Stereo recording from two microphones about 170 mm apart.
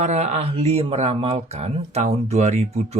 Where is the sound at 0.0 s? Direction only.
40° right (ahead or behind).